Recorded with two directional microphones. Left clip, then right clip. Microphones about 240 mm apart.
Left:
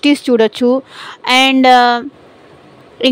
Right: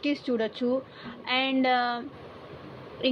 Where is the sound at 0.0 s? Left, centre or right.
Left.